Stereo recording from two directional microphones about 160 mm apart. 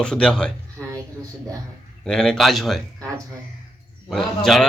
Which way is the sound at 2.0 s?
5° left (ahead or behind).